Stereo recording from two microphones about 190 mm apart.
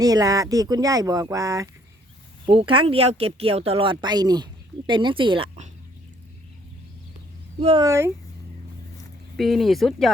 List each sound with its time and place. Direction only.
0.0 s speech: 20° right (ahead or behind)
2.5 s speech: 30° right (ahead or behind)
7.6 s speech: 30° right (ahead or behind)
7.9 s speech: 15° right (ahead or behind)
9.4 s speech: centre (ahead or behind)